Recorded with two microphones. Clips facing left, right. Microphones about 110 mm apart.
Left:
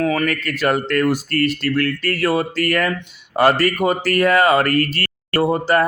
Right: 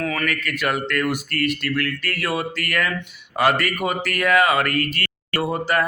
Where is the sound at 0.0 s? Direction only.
30° left (ahead or behind).